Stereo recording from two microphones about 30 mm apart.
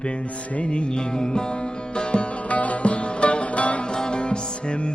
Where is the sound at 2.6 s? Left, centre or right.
Left.